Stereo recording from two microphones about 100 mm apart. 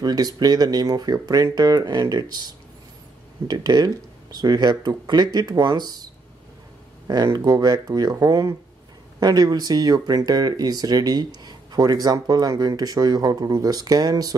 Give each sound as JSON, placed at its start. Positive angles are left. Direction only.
{"t": 0.0, "sound": "speech", "side_deg": -40}
{"t": 7.1, "sound": "speech", "side_deg": -45}